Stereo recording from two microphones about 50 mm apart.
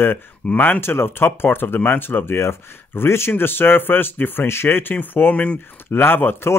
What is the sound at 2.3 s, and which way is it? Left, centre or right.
Speech, left.